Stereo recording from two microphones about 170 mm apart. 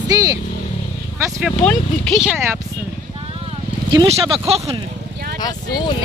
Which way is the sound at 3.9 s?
25° right (ahead or behind).